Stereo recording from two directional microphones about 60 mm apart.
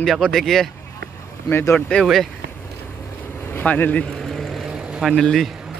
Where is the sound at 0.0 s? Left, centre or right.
Centre.